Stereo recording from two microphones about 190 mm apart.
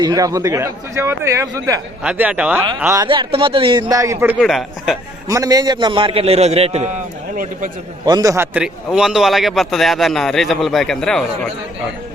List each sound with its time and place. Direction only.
0.0 s a man's voice: 20° right (ahead or behind); by 4.9 s centre (ahead or behind)
5.3 s a man's voice: 20° right (ahead or behind); by 6.9 s 35° right (ahead or behind)
8.0 s a man's voice: 20° right (ahead or behind); by 11.2 s 5° left (ahead or behind)